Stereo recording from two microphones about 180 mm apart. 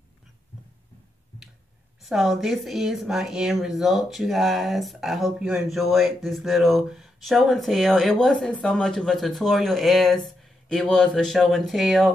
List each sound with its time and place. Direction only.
2.0 s speech: centre (ahead or behind)